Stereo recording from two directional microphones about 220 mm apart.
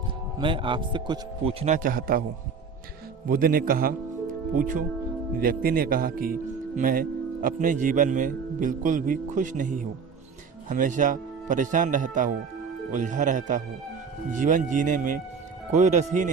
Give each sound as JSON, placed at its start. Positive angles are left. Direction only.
{"t": 0.3, "sound": "speech", "side_deg": -20}
{"t": 3.2, "sound": "speech", "side_deg": -40}